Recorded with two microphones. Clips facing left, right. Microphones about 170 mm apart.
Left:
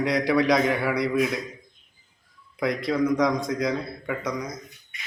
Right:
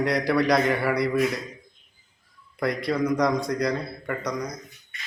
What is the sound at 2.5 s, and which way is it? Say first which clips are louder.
A man's voice: left 1 dB; centre (ahead or behind).